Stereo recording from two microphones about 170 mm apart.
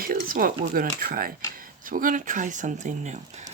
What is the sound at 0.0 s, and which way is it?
A woman's voice, 55° right (ahead or behind).